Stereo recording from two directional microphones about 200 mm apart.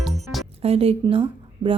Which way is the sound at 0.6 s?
30° right (ahead or behind).